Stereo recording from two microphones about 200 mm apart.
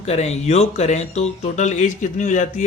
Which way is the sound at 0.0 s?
35° left (ahead or behind).